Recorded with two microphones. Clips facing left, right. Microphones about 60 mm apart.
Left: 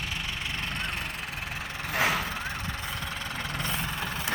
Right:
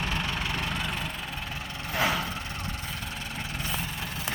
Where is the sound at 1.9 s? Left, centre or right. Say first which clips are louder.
Even; left.